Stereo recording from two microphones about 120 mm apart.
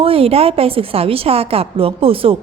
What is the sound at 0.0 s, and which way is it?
A woman's voice, 50° right (ahead or behind).